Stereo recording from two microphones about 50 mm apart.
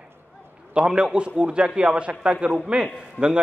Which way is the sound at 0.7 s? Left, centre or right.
Centre.